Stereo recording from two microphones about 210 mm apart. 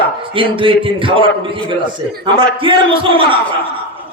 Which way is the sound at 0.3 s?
25° right (ahead or behind).